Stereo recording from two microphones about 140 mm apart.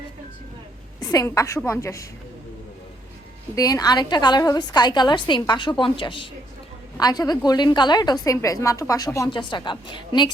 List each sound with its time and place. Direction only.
0.9 s a woman's voice: 25° left (ahead or behind)
3.5 s a woman's voice: 25° left (ahead or behind)
9.3 s a woman's voice: 35° left (ahead or behind)